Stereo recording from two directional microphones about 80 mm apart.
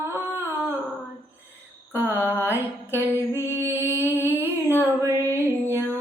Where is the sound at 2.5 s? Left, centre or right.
Right.